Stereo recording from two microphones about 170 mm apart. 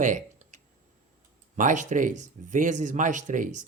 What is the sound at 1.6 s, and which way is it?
A man's voice, 50° right (ahead or behind).